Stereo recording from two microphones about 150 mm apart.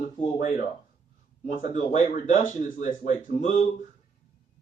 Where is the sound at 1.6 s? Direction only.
55° left (ahead or behind).